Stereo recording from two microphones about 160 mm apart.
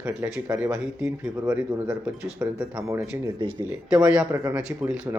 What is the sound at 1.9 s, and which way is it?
Speech, 5° right (ahead or behind).